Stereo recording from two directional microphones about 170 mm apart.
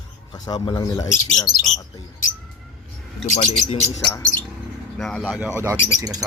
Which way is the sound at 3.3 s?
45° left (ahead or behind).